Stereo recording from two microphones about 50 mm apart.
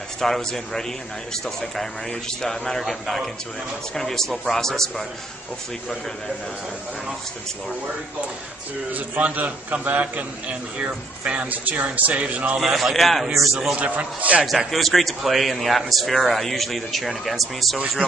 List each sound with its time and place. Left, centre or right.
0.2 s a man's voice: centre
8.9 s a man's voice: right
12.5 s a man's voice: centre
13.7 s speech: right
14.7 s a man's voice: centre